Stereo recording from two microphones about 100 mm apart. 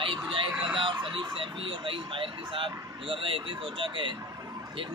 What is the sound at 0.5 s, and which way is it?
Vehicle, 10° right (ahead or behind).